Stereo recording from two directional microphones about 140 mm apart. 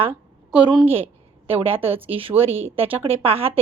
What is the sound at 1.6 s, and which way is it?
A woman's voice, 45° right (ahead or behind).